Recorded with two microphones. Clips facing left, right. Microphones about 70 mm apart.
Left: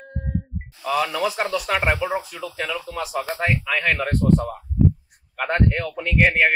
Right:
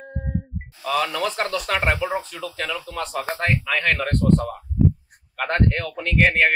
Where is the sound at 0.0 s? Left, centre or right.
Centre.